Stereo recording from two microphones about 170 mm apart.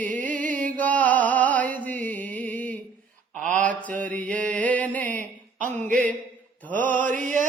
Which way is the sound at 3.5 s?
10° left (ahead or behind).